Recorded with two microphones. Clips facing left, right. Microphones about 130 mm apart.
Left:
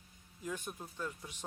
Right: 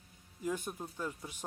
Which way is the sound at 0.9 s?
10° right (ahead or behind).